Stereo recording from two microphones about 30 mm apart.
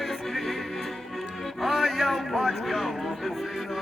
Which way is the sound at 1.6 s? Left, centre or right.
Centre.